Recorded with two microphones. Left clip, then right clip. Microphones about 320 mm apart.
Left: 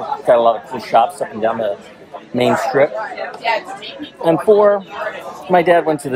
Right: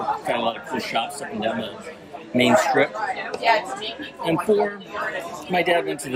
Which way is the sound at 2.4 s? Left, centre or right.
Centre.